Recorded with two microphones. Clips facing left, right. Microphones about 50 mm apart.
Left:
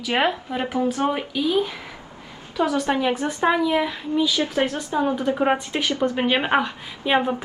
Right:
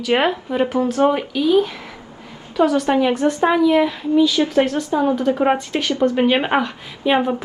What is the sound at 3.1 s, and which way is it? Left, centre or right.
A woman's voice, centre.